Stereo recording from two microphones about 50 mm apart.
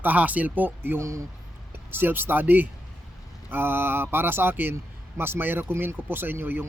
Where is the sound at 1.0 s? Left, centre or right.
Right.